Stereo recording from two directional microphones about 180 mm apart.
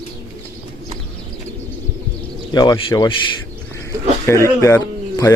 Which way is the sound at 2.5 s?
25° left (ahead or behind).